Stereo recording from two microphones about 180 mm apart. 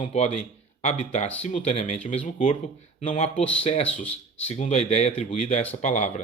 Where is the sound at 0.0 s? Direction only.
35° left (ahead or behind).